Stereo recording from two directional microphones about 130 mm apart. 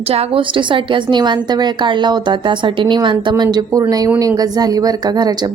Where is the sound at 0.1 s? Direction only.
45° right (ahead or behind).